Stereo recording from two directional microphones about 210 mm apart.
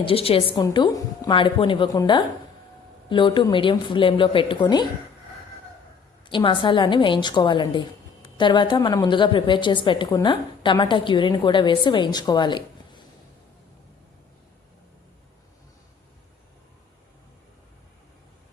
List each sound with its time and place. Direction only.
0.0 s a woman's voice: 25° left (ahead or behind)
6.2 s a woman's voice: 25° left (ahead or behind)